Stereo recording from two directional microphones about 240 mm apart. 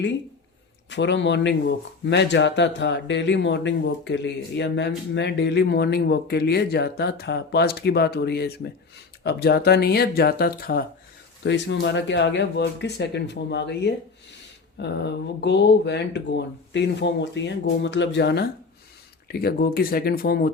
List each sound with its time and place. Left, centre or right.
0.9 s speech: left